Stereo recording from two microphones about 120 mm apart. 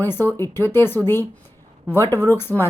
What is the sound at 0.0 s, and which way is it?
A woman's voice, 15° left (ahead or behind).